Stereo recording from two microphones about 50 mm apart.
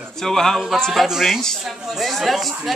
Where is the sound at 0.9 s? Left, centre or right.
Centre.